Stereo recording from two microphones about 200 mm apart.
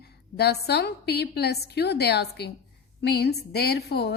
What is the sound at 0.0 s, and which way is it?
A woman's voice, 55° left (ahead or behind).